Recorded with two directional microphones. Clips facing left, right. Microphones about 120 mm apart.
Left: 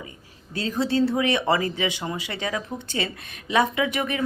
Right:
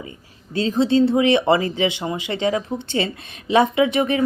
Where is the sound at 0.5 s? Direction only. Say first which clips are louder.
Right 6 dB; 25° right (ahead or behind).